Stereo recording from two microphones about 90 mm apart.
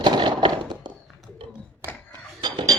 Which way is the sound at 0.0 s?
55° right (ahead or behind).